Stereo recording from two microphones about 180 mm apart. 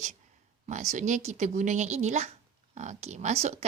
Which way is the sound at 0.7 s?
40° right (ahead or behind).